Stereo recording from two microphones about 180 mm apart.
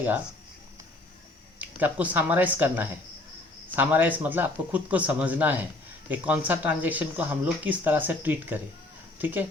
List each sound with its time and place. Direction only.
1.5 s speech: 10° right (ahead or behind)